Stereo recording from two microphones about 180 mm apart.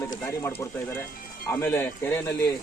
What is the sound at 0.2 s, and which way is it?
Speech, 15° left (ahead or behind).